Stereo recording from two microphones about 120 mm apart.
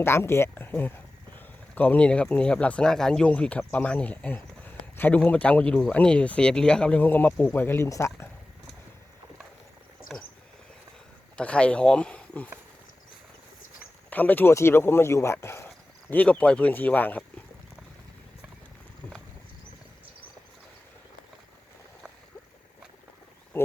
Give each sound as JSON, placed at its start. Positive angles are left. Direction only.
{"t": 0.0, "sound": "speech", "side_deg": 20}
{"t": 10.1, "sound": "a sound", "side_deg": 5}
{"t": 11.3, "sound": "speech", "side_deg": 10}
{"t": 14.1, "sound": "speech", "side_deg": 15}